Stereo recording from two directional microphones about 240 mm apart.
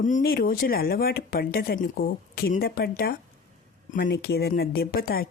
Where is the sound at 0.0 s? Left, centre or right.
Left.